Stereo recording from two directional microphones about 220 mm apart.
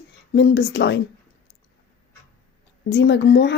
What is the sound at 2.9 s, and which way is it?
Speech, 50° left (ahead or behind).